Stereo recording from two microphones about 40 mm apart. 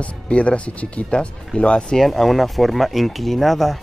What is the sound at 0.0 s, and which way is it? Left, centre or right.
Speech, left.